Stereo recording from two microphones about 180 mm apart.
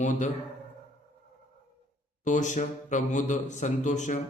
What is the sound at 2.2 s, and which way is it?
Speech, 45° left (ahead or behind).